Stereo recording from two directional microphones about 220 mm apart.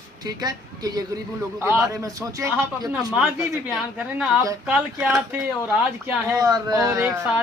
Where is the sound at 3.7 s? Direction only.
5° right (ahead or behind).